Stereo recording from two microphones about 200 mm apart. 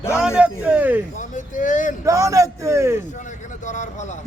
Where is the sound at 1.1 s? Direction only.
40° left (ahead or behind).